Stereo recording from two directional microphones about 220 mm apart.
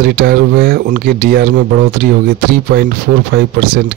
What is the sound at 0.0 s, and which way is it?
A man's voice, 45° right (ahead or behind).